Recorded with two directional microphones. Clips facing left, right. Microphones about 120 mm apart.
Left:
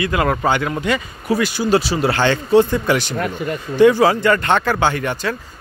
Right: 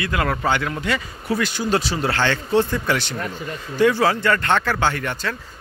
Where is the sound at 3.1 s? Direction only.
60° left (ahead or behind).